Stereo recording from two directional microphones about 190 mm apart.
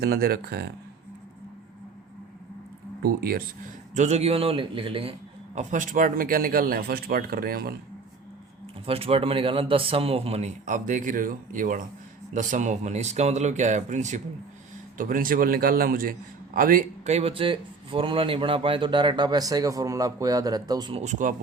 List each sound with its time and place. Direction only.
0.0 s speech: 55° right (ahead or behind)
3.9 s a man's voice: 35° right (ahead or behind)
5.5 s speech: 45° right (ahead or behind)
8.9 s a man's voice: 30° right (ahead or behind)
21.0 s a man's voice: 40° right (ahead or behind)